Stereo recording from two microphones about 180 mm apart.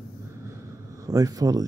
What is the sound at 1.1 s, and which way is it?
Speech, 20° right (ahead or behind).